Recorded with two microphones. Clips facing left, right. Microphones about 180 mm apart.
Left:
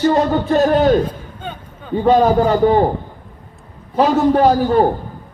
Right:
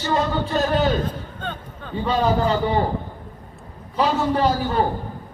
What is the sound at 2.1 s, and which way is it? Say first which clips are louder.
Speech: left 7 dB; 50° left (ahead or behind).